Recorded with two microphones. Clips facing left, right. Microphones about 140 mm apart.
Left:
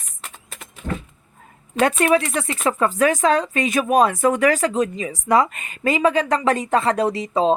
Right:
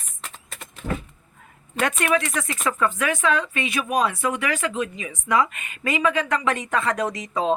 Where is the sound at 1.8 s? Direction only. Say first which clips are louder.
Left 5 dB; 35° left (ahead or behind).